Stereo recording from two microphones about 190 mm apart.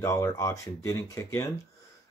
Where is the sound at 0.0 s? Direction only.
15° left (ahead or behind).